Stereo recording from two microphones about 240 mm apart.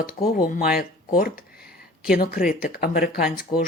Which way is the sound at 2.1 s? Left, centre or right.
Left.